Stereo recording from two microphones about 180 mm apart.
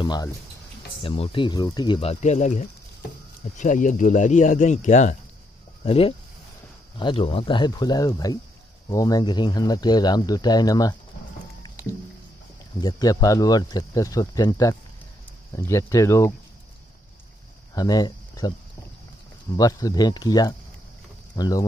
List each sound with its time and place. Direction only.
0.0 s speech: 25° left (ahead or behind)
12.8 s speech: 20° left (ahead or behind)
17.7 s speech: 20° left (ahead or behind)
19.5 s speech: 20° left (ahead or behind)